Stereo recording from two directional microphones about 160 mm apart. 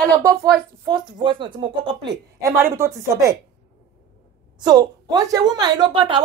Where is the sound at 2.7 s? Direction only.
20° right (ahead or behind).